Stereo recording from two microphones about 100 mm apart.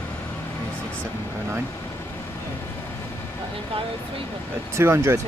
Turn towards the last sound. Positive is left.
turn(degrees=-30)  # may be behind; listen again after turning